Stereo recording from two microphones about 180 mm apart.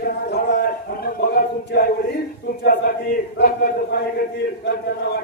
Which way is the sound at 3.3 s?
60° left (ahead or behind).